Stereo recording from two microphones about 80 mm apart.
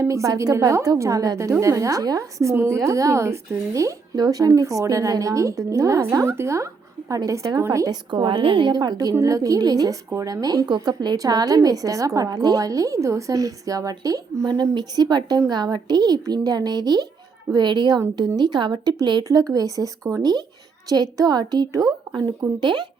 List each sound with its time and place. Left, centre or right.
0.1 s a woman's voice: right
8.1 s a woman's voice: right
10.1 s a woman's voice: right
11.2 s a woman's voice: right
19.5 s a woman's voice: right
20.9 s speech: right
22.6 s speech: right